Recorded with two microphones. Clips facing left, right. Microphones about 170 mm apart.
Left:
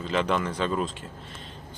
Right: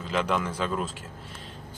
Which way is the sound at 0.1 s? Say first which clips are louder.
Left 1 dB; 10° right (ahead or behind).